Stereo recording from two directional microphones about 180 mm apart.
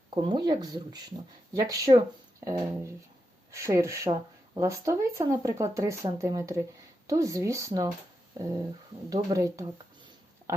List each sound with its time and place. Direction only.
0.1 s speech: 25° right (ahead or behind)
9.0 s speech: 20° right (ahead or behind)